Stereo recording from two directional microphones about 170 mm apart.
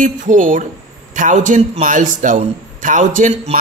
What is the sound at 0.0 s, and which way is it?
Speech, 50° right (ahead or behind).